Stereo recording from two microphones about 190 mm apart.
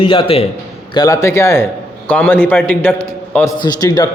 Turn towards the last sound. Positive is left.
turn(degrees=20)  # may be behind; listen again after turning